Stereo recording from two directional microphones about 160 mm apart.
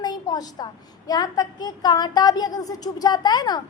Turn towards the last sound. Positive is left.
turn(degrees=25)  # may be behind; listen again after turning